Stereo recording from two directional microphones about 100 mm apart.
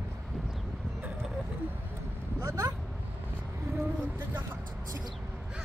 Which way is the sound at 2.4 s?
30° right (ahead or behind).